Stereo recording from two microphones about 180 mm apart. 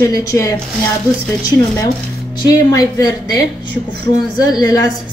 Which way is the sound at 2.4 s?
20° left (ahead or behind).